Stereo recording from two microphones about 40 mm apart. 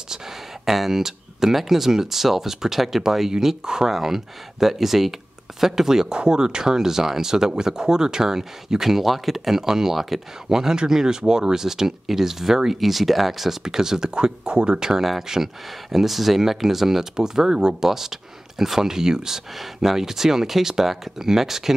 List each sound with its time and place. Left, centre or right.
0.7 s speech: centre
14.1 s speech: right